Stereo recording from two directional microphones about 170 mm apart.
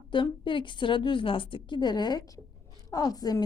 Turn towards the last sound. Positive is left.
turn(degrees=25)  # may be behind; listen again after turning